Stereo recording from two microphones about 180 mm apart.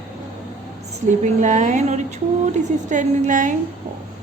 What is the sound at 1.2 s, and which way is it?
A woman's voice, 40° right (ahead or behind).